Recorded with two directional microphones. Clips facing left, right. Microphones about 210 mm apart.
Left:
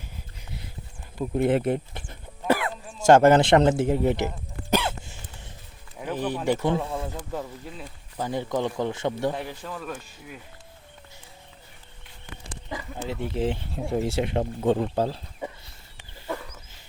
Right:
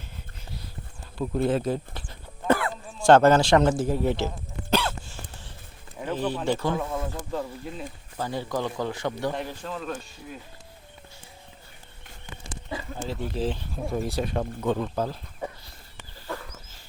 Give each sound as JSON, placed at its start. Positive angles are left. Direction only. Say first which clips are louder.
{"t": 1.2, "sound": "a sound", "louder": "left 2 dB", "side_deg": 20}
{"t": 3.5, "sound": "speech", "louder": "left 2 dB", "side_deg": 20}
{"t": 4.7, "sound": "hiccup", "louder": "left 1 dB", "side_deg": 20}
{"t": 6.1, "sound": "speech", "louder": "left 1 dB", "side_deg": 15}
{"t": 8.2, "sound": "speech", "louder": "left 2 dB", "side_deg": 20}
{"t": 9.3, "sound": "speech", "louder": "right 1 dB", "side_deg": 10}
{"t": 13.1, "sound": "speech", "louder": "left 2 dB", "side_deg": 20}